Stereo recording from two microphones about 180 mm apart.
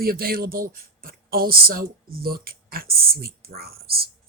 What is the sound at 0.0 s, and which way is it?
Speech, 55° right (ahead or behind).